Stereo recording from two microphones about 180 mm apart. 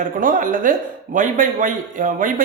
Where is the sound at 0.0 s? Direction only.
50° right (ahead or behind).